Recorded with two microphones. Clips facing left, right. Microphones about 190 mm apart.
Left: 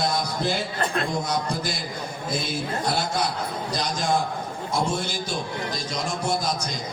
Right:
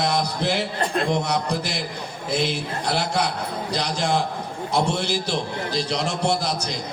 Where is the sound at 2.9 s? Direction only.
70° right (ahead or behind).